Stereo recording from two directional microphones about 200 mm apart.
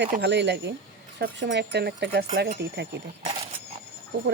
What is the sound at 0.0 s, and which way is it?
Speech, 55° right (ahead or behind).